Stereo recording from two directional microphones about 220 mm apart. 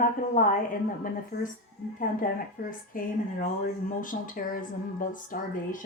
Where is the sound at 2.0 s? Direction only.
40° left (ahead or behind).